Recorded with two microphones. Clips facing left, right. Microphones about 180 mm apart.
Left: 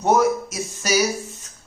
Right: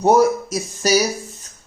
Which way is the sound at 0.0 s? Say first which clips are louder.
Right 4 dB; 35° right (ahead or behind).